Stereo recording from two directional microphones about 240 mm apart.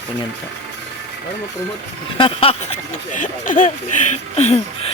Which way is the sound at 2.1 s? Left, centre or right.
Left.